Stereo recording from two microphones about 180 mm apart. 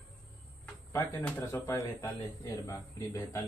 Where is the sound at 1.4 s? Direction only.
15° left (ahead or behind).